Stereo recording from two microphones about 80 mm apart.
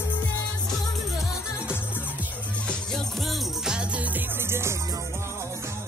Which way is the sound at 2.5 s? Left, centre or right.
Centre.